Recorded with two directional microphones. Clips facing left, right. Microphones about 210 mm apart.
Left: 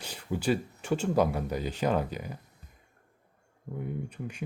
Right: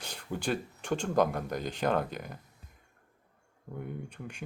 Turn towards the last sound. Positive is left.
turn(degrees=5)  # may be behind; listen again after turning